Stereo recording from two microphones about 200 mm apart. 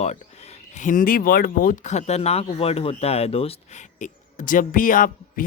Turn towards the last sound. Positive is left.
turn(degrees=45)  # may be behind; listen again after turning